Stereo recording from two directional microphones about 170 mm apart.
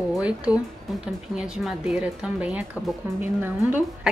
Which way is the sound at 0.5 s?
5° right (ahead or behind).